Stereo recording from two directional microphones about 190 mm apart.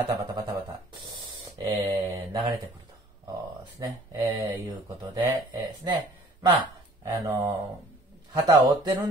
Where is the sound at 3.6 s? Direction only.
20° right (ahead or behind).